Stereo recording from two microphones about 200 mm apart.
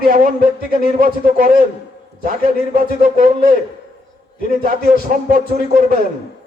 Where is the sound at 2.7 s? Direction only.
45° right (ahead or behind).